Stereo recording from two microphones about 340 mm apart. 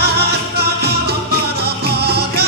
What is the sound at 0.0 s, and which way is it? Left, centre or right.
Music, right.